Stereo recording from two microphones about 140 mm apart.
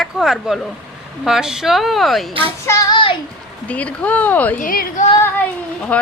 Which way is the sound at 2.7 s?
20° left (ahead or behind).